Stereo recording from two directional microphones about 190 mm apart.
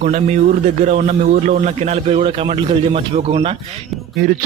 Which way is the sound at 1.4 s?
35° right (ahead or behind).